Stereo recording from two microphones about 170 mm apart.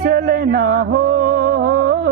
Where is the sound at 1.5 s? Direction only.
60° right (ahead or behind).